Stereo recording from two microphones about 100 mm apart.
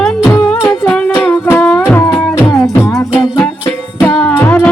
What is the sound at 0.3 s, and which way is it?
Music, 20° left (ahead or behind).